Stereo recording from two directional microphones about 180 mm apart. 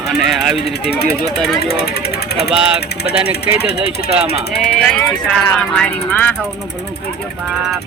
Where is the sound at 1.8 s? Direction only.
60° left (ahead or behind).